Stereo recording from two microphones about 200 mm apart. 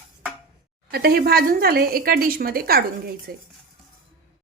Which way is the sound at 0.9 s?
50° right (ahead or behind).